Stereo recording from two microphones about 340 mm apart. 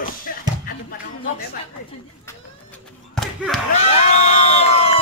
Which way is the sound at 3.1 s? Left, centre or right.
Centre.